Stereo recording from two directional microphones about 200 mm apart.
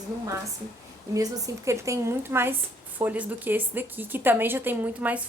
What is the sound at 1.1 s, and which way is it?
Speech, 15° right (ahead or behind).